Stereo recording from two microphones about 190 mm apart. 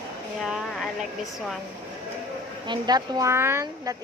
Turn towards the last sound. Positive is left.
turn(degrees=-15)  # may be behind; listen again after turning